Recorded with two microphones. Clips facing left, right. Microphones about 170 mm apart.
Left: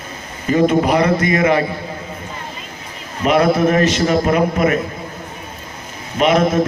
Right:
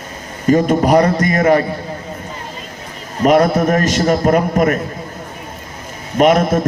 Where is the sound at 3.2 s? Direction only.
45° right (ahead or behind).